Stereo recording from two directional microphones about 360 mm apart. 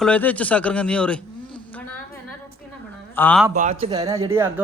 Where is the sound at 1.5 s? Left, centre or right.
Centre.